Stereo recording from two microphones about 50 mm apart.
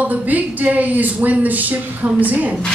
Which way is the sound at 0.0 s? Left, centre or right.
Right.